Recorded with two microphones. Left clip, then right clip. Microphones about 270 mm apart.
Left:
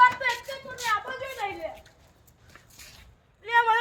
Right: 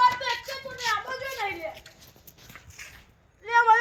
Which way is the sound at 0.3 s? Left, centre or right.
Left.